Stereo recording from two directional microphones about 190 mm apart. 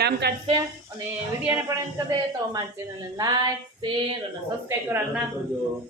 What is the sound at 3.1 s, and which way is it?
Female singing, 20° right (ahead or behind).